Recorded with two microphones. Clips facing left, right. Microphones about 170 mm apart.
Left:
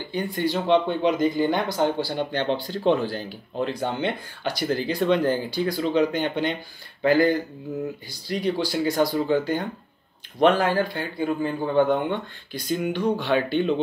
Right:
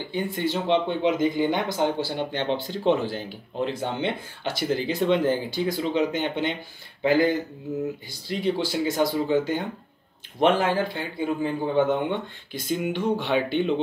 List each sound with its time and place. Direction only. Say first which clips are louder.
0.1 s speech: left 2 dB; 20° right (ahead or behind)